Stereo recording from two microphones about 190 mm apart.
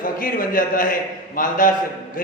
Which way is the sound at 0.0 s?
45° left (ahead or behind).